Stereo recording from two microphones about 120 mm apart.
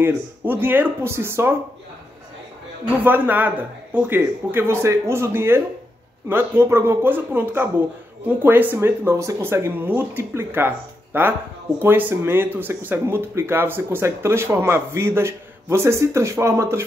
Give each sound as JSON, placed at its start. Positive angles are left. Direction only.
{"t": 0.0, "sound": "speech", "side_deg": -15}
{"t": 3.0, "sound": "speech", "side_deg": -15}